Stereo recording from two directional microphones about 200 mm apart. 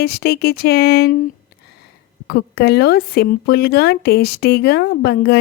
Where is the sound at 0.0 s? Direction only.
55° left (ahead or behind).